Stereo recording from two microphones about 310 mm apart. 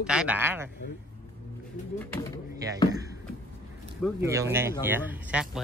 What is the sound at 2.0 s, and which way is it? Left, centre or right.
Speech, centre.